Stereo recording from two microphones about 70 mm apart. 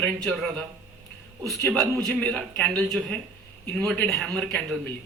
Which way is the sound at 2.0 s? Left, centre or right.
Centre.